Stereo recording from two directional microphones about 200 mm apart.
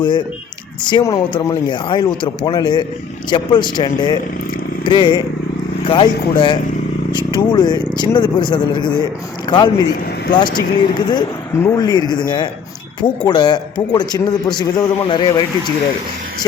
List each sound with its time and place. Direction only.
0.9 s a man's voice: 20° left (ahead or behind)